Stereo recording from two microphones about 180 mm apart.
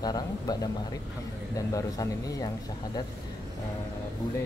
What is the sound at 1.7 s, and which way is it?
Speech, 20° left (ahead or behind).